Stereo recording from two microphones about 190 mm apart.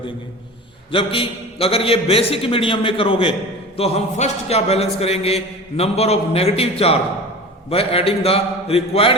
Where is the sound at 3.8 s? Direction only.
35° left (ahead or behind).